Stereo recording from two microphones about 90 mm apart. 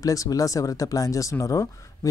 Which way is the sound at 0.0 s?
40° left (ahead or behind).